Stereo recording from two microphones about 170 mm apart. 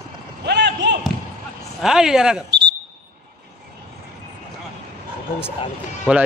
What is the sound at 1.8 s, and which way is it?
Speech, 5° right (ahead or behind).